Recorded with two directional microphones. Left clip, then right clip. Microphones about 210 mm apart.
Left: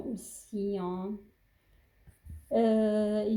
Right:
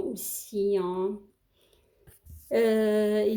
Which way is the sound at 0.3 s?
40° right (ahead or behind).